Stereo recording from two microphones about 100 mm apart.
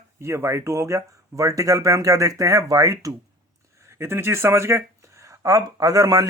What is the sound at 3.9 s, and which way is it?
Speech, 25° right (ahead or behind).